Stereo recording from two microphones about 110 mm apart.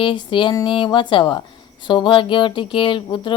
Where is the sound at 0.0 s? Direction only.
50° left (ahead or behind).